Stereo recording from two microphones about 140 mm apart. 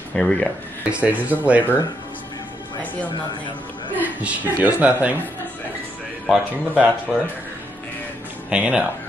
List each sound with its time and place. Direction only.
0.1 s speech: 5° left (ahead or behind)
0.8 s speech: 10° right (ahead or behind)
3.9 s speech: 10° right (ahead or behind)
6.2 s speech: 10° right (ahead or behind)
8.5 s speech: 10° right (ahead or behind)